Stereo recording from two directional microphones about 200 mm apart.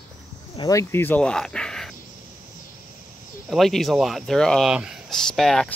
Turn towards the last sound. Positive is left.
turn(degrees=0)  # may be behind; listen again after turning